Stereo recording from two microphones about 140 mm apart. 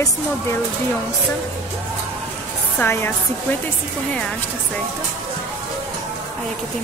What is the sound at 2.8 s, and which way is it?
Speech, 15° left (ahead or behind).